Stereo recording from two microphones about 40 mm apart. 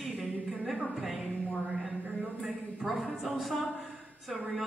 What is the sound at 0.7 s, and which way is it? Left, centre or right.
Speech, centre.